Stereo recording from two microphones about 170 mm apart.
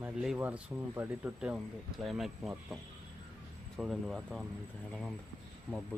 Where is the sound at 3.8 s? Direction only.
Centre (ahead or behind).